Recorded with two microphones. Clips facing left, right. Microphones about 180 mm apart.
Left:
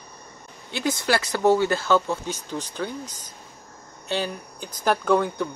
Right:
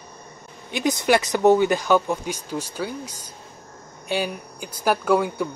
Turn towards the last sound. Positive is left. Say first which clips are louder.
# right 1 dB
turn(degrees=-10)  # may be behind; listen again after turning